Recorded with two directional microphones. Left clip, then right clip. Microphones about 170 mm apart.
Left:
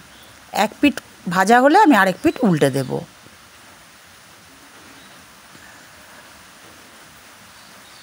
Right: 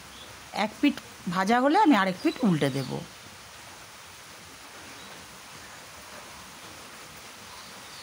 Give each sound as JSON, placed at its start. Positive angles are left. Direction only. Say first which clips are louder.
{"t": 0.5, "sound": "a woman's voice", "louder": "left 9 dB", "side_deg": 40}